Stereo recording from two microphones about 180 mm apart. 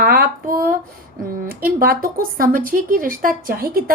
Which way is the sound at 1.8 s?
55° right (ahead or behind).